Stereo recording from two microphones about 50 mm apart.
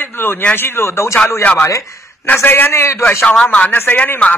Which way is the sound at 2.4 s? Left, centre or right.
Left.